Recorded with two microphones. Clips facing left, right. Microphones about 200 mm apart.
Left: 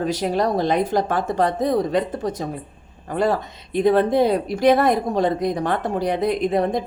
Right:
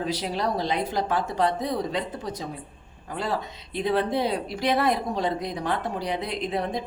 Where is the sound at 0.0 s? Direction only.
45° left (ahead or behind).